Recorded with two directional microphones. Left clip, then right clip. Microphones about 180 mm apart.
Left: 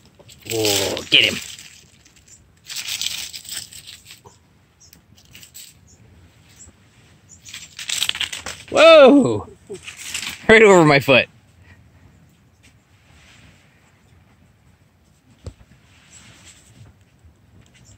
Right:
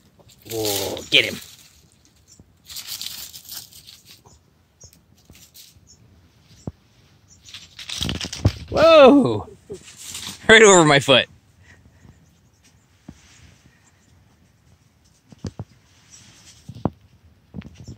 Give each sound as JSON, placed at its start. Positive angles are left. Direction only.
{"t": 0.4, "sound": "speech", "side_deg": -5}
{"t": 1.1, "sound": "speech", "side_deg": 0}
{"t": 3.1, "sound": "tearing", "side_deg": 0}
{"t": 7.7, "sound": "a sound", "side_deg": -15}
{"t": 8.7, "sound": "speech", "side_deg": -10}
{"t": 10.4, "sound": "speech", "side_deg": 5}